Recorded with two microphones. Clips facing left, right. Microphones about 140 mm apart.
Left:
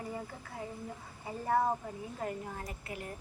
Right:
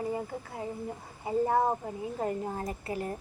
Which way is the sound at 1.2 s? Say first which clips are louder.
Right 5 dB; 25° right (ahead or behind).